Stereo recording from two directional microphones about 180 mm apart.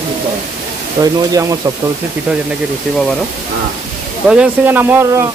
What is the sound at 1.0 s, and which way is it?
Speech, 20° right (ahead or behind).